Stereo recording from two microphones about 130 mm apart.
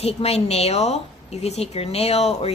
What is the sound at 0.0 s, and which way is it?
A woman's voice, 50° left (ahead or behind).